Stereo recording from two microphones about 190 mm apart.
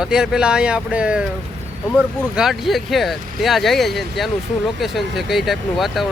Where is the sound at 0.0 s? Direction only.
5° right (ahead or behind).